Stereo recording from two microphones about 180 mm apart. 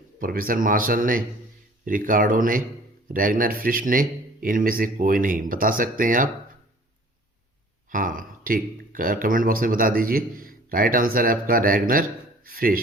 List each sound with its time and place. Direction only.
0.2 s speech: 50° right (ahead or behind)
7.9 s speech: 50° right (ahead or behind)